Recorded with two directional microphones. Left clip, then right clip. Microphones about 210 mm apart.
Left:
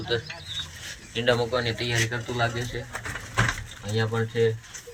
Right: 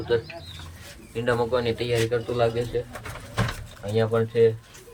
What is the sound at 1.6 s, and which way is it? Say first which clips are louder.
Speech: right 2 dB; 10° right (ahead or behind).